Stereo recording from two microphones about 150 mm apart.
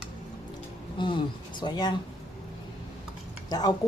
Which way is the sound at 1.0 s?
30° left (ahead or behind).